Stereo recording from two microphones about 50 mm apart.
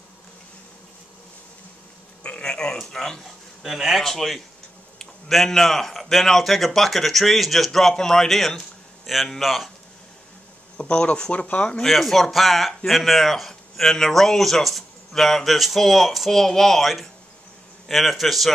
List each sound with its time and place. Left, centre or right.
2.2 s speech: left
3.6 s speech: centre
10.8 s speech: left
11.8 s speech: centre